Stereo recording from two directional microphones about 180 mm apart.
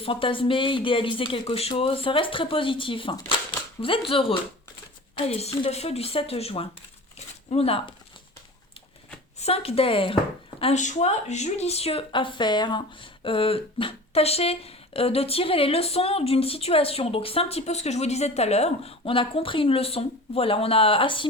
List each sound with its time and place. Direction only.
0.0 s speech: 30° left (ahead or behind)
9.4 s speech: 35° left (ahead or behind)